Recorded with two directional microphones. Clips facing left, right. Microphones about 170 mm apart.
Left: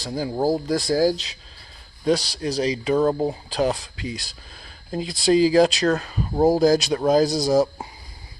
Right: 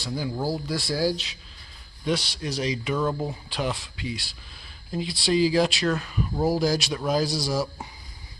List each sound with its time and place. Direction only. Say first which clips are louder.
0.0 s speech: left 6 dB; 40° left (ahead or behind)